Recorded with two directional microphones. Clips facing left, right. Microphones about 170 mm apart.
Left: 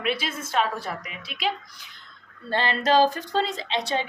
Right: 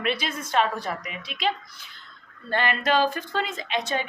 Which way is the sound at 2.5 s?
30° left (ahead or behind).